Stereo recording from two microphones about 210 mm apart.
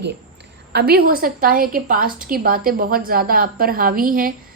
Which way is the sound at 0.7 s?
50° right (ahead or behind).